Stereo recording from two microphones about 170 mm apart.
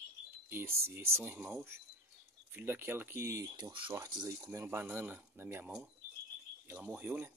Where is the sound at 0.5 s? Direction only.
15° right (ahead or behind).